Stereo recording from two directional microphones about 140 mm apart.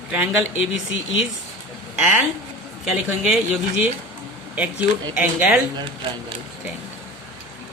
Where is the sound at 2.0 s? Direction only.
5° right (ahead or behind).